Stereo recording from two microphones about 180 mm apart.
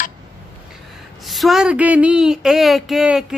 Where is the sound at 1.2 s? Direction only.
Centre (ahead or behind).